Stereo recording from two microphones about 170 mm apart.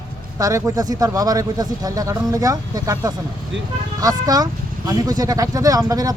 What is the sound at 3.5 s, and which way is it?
Speech, 90° right.